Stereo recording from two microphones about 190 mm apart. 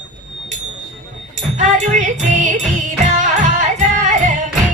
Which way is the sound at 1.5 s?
40° right (ahead or behind).